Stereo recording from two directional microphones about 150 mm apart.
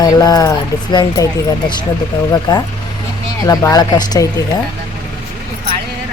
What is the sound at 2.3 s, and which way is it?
Speech, 25° left (ahead or behind).